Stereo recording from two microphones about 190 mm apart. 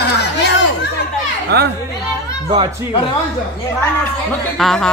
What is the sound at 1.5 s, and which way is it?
Speech, 60° right (ahead or behind).